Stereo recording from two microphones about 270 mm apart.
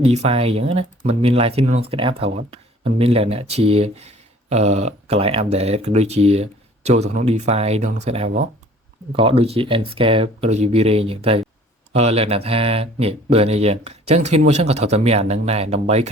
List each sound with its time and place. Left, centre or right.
0.0 s speech: right